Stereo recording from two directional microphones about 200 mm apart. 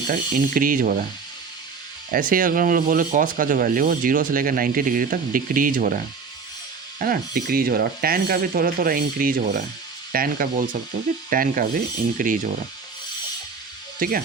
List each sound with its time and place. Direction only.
0.1 s speech: 45° right (ahead or behind)
2.0 s speech: 45° right (ahead or behind)
7.0 s speech: 45° right (ahead or behind)
14.0 s speech: 45° right (ahead or behind)